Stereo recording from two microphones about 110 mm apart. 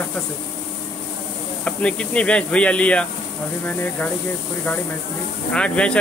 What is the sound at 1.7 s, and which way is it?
Speech, 10° left (ahead or behind).